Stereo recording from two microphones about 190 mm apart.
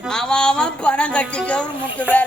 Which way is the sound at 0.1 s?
5° left (ahead or behind).